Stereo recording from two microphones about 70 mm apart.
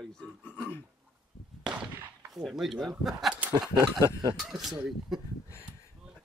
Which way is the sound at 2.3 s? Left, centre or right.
Centre.